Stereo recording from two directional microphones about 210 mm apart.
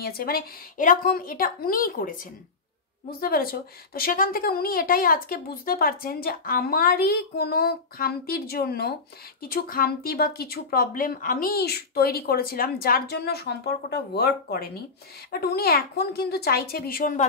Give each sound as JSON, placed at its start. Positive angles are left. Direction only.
{"t": 0.0, "sound": "speech", "side_deg": 45}